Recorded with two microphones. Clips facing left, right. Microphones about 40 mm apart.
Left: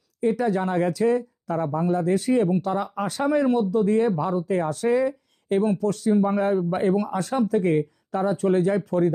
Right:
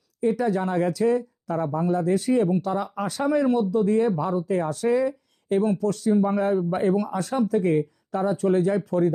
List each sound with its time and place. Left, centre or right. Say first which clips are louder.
0.2 s speech: even; left